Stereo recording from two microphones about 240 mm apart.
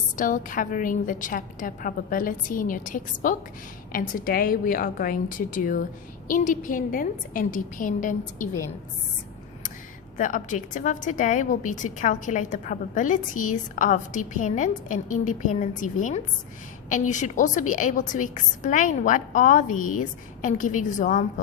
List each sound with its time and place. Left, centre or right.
0.2 s a woman's voice: left
10.2 s a woman's voice: left